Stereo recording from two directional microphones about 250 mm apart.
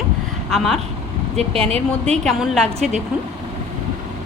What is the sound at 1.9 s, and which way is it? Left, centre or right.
Speech, centre.